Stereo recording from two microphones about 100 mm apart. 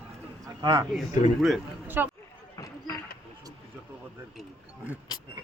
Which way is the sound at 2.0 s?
20° right (ahead or behind).